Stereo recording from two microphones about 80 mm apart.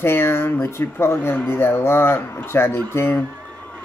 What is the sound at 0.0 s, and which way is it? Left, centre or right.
Speech, left.